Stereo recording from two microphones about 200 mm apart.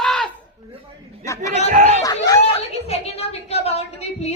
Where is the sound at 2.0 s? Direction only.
15° left (ahead or behind).